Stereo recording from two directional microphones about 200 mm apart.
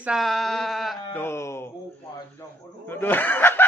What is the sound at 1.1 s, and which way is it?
Speech, 10° left (ahead or behind).